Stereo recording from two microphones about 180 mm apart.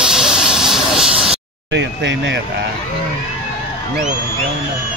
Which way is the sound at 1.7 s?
80° right.